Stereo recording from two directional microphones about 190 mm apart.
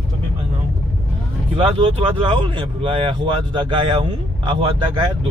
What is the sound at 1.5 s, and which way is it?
Speech, 30° right (ahead or behind).